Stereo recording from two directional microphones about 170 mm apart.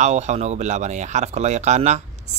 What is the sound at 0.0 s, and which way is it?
Speech, 40° right (ahead or behind).